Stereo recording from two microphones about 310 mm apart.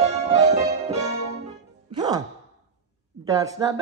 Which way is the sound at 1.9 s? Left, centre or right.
Centre.